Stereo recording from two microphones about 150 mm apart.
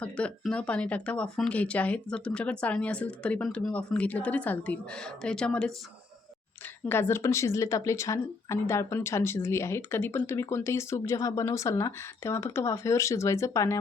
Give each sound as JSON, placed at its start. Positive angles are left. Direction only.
{"t": 0.0, "sound": "speech", "side_deg": 5}
{"t": 6.8, "sound": "speech", "side_deg": 15}